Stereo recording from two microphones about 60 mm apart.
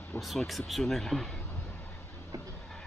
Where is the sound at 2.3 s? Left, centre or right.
Right.